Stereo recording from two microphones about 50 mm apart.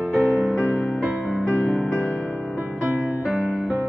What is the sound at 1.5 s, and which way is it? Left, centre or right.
Music, left.